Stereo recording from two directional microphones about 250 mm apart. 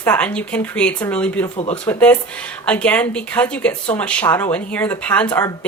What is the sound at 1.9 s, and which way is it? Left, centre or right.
Speech, centre.